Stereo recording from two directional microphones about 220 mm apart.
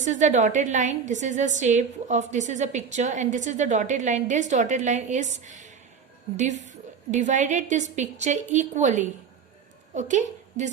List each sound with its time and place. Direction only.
0.0 s a woman's voice: 35° right (ahead or behind)